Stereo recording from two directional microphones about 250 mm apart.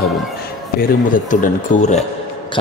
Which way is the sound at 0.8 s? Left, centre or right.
Left.